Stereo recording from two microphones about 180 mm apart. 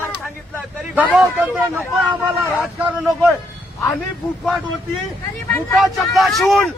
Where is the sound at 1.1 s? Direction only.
10° right (ahead or behind).